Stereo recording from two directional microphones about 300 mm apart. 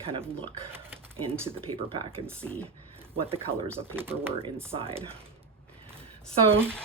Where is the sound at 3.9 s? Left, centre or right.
Centre.